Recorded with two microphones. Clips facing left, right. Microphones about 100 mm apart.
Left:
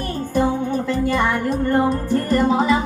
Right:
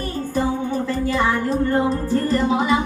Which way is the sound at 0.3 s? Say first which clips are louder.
Left 3 dB; 60° left (ahead or behind).